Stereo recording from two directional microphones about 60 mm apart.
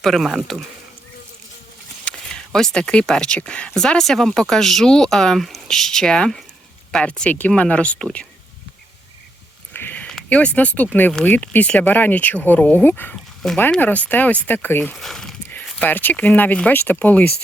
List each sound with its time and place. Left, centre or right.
0.0 s speech: centre
2.0 s speech: centre
3.8 s speech: centre
9.7 s a sound: left
10.2 s speech: left
13.1 s a sound: centre
13.7 s speech: left
14.9 s speech: centre
15.8 s speech: left